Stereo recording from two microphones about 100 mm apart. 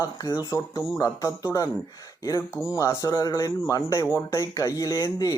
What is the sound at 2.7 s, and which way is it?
Speech, 30° left (ahead or behind).